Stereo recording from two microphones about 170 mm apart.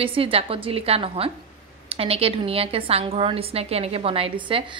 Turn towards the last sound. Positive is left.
turn(degrees=-30)  # may be behind; listen again after turning